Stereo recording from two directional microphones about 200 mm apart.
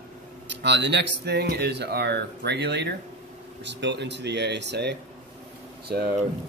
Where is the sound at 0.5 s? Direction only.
60° right (ahead or behind).